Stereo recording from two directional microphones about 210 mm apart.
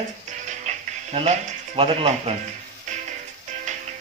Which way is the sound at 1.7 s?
25° right (ahead or behind).